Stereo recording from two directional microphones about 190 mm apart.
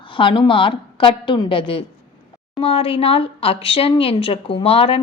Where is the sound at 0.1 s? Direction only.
25° left (ahead or behind).